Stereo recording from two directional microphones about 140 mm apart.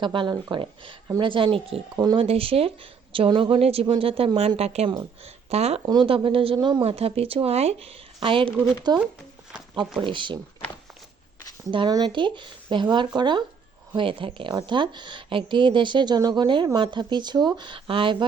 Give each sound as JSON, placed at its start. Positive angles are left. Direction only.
{"t": 0.0, "sound": "a woman's voice", "side_deg": -35}
{"t": 5.8, "sound": "a woman's voice", "side_deg": -30}
{"t": 11.7, "sound": "a woman's voice", "side_deg": -30}